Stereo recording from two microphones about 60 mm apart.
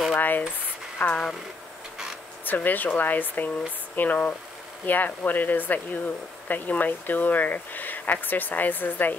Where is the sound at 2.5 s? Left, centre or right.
Left.